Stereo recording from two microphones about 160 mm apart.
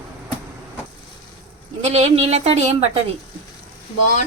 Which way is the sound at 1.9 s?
40° right (ahead or behind).